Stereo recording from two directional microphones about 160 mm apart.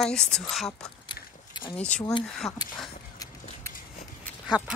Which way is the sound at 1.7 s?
5° left (ahead or behind).